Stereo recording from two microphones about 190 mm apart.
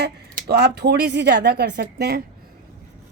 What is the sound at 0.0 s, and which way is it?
Speech, 60° right (ahead or behind).